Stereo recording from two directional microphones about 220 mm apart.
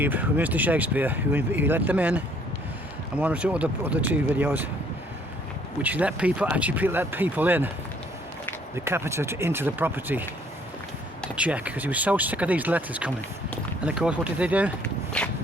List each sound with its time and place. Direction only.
0.0 s speech: 10° right (ahead or behind)
5.8 s speech: 5° right (ahead or behind)
8.7 s speech: 10° right (ahead or behind)
15.2 s speech: 5° left (ahead or behind)